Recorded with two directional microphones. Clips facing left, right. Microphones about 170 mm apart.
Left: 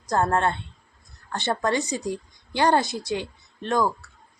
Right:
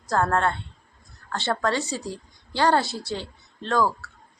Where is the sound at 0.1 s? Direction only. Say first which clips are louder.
Even; 20° left (ahead or behind).